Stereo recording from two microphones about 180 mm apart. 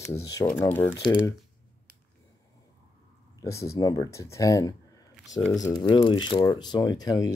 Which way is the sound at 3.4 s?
15° left (ahead or behind).